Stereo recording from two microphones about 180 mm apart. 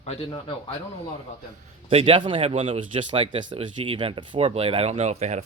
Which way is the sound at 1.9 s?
35° right (ahead or behind).